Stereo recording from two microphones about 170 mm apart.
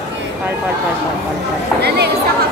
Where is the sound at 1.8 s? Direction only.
70° right (ahead or behind).